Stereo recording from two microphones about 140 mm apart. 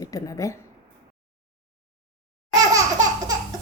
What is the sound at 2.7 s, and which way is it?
Laughter, 25° right (ahead or behind).